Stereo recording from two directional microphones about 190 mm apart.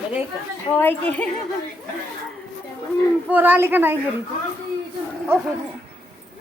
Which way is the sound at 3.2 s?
10° right (ahead or behind).